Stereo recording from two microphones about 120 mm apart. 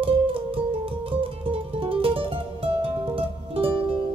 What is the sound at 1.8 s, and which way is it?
Music, 50° right (ahead or behind).